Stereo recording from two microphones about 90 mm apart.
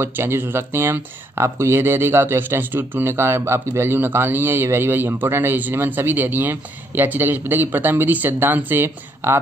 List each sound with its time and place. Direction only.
0.0 s speech: 25° right (ahead or behind)